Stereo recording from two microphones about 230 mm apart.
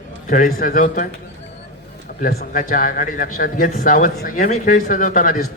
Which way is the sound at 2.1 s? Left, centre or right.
Left.